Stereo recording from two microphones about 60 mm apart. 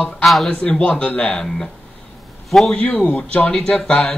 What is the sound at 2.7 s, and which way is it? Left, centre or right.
Speech, left.